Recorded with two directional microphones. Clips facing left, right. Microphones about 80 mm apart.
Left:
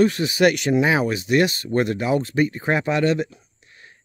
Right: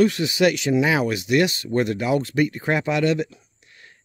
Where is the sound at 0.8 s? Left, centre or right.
Left.